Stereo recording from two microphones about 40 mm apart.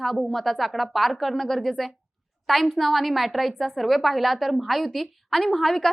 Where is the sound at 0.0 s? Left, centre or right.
Centre.